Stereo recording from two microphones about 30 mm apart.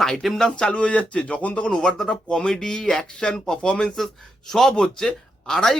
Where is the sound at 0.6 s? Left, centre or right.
Left.